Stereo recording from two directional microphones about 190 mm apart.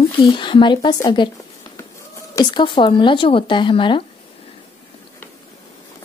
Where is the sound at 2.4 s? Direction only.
25° left (ahead or behind).